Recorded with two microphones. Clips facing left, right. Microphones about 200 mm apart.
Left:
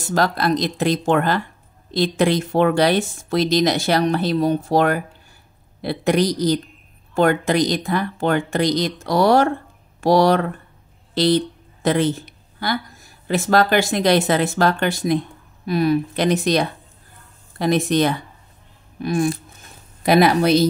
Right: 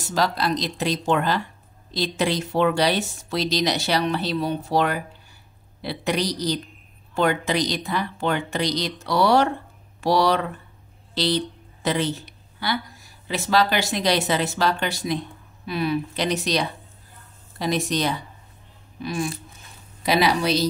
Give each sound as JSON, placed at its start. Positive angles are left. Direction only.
{"t": 0.0, "sound": "speech", "side_deg": 50}